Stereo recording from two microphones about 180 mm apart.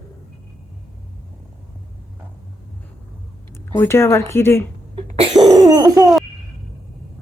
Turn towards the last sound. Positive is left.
turn(degrees=-20)  # may be behind; listen again after turning